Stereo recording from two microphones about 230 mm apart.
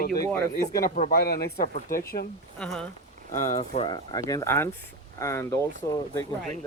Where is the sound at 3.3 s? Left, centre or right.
Left.